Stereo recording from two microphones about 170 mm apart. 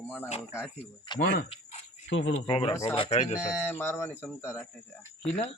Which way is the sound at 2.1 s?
90° left.